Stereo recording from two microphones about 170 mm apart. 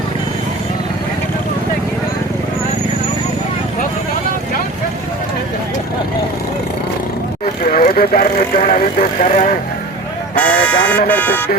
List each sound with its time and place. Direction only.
7.6 s speech: 55° left (ahead or behind)
10.3 s buzzer: 10° left (ahead or behind)
11.1 s speech: 10° left (ahead or behind)